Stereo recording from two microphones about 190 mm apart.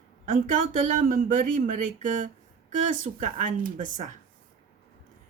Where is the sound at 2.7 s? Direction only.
40° right (ahead or behind).